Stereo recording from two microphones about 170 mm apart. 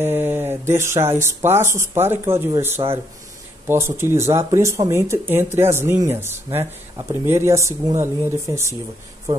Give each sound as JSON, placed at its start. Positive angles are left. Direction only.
{"t": 0.0, "sound": "speech", "side_deg": -10}